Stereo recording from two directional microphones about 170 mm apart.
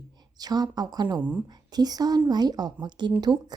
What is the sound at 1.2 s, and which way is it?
Speech, 5° right (ahead or behind).